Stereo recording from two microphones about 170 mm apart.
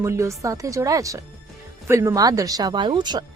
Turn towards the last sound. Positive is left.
turn(degrees=-25)  # may be behind; listen again after turning